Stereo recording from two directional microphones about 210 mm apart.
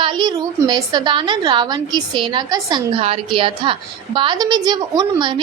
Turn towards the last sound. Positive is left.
turn(degrees=-20)  # may be behind; listen again after turning